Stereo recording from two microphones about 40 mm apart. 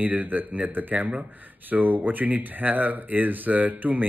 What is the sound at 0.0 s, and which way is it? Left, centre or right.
Speech, right.